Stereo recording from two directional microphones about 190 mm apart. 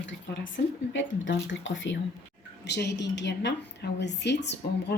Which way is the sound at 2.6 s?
60° left (ahead or behind).